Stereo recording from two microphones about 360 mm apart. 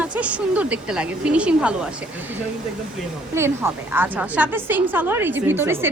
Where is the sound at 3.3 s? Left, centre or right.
Centre.